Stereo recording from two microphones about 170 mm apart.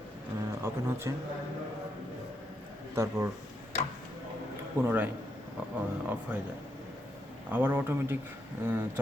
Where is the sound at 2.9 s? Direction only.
15° right (ahead or behind).